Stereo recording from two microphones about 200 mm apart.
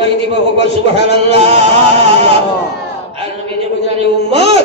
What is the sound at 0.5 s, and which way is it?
A man's voice, 60° left (ahead or behind).